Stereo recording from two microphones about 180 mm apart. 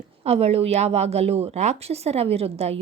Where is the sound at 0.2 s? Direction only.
35° right (ahead or behind).